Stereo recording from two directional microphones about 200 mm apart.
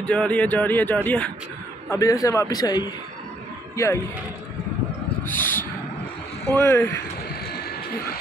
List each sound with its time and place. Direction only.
0.0 s speech: 5° left (ahead or behind)
5.2 s a sound: 10° left (ahead or behind)
6.5 s speech: 10° left (ahead or behind)